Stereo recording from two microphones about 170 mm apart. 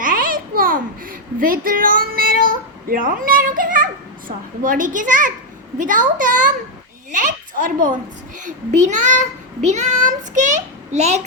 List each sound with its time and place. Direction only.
0.0 s babbling: 55° right (ahead or behind)
4.3 s a child's voice: 55° right (ahead or behind)